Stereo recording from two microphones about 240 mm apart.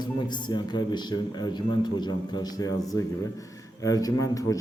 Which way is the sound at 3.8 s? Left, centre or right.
Centre.